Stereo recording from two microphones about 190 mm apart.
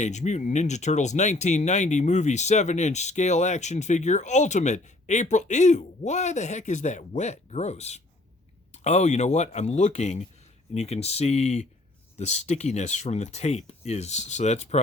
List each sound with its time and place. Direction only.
0.0 s speech: 40° left (ahead or behind)